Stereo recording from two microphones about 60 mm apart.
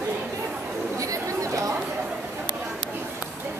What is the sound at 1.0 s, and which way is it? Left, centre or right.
Chatter, right.